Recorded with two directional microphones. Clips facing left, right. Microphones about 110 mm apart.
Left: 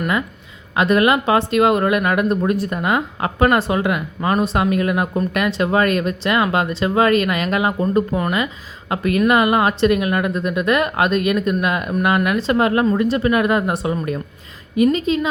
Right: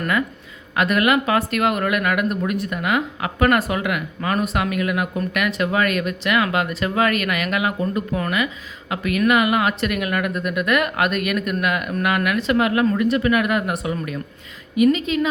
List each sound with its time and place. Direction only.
0.8 s speech: 25° left (ahead or behind)